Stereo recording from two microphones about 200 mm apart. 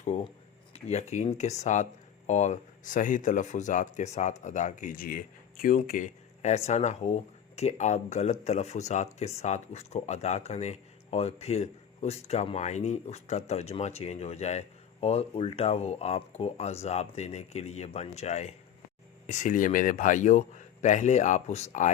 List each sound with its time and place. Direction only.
0.0 s speech: 35° left (ahead or behind)